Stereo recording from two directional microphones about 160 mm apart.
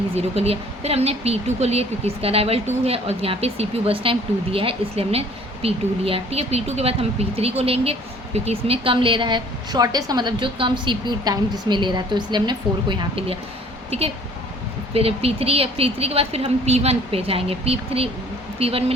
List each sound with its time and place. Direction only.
0.2 s speech: 40° right (ahead or behind)